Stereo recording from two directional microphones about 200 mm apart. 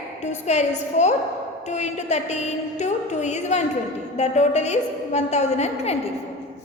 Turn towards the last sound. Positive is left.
turn(degrees=30)  # may be behind; listen again after turning